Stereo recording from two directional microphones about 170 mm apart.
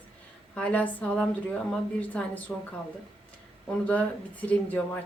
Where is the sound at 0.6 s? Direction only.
10° left (ahead or behind).